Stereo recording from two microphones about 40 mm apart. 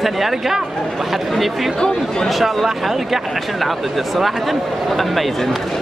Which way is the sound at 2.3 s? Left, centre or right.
Centre.